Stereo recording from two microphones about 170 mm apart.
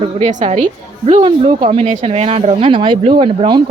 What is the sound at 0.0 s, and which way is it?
Speech, 45° right (ahead or behind).